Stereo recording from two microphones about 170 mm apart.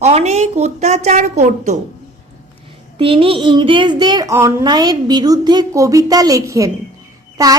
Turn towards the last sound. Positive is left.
turn(degrees=-20)  # may be behind; listen again after turning